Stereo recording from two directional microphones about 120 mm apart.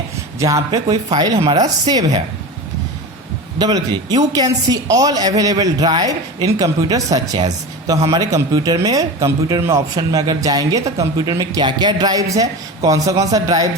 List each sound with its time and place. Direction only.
0.3 s speech: 25° right (ahead or behind)
3.6 s speech: 35° right (ahead or behind)